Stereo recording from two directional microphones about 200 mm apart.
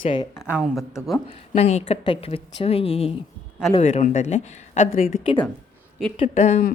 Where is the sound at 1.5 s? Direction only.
30° left (ahead or behind).